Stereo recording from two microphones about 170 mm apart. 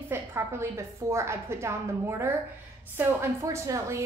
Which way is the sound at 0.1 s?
15° right (ahead or behind).